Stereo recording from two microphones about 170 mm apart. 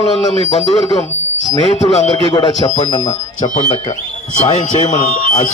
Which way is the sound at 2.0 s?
30° left (ahead or behind).